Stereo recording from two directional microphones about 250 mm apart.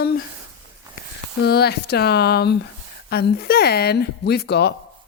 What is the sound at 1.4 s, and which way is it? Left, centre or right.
Speech, left.